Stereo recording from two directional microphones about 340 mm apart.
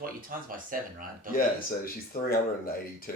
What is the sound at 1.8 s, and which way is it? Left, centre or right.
Speech, left.